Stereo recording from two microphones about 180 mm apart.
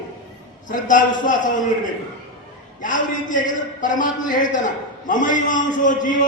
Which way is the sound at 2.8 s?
45° left (ahead or behind).